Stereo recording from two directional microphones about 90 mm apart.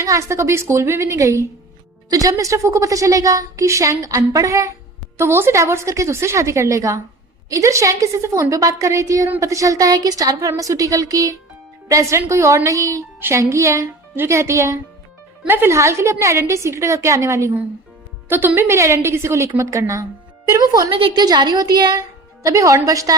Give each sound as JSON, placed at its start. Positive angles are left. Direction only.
{"t": 0.0, "sound": "a woman's voice", "side_deg": -35}
{"t": 5.1, "sound": "a woman's voice", "side_deg": -30}
{"t": 18.3, "sound": "a woman's voice", "side_deg": -20}
{"t": 18.7, "sound": "a woman's voice", "side_deg": -30}
{"t": 20.9, "sound": "a woman's voice", "side_deg": -80}
{"t": 21.2, "sound": "speech", "side_deg": -50}
{"t": 22.4, "sound": "a woman's voice", "side_deg": -35}